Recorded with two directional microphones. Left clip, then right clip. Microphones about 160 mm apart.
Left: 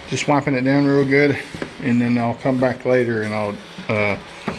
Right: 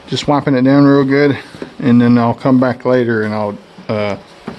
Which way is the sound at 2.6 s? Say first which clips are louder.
Right 4 dB; 30° right (ahead or behind).